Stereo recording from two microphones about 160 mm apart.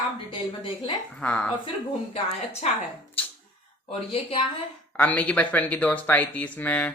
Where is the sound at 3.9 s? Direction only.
40° left (ahead or behind).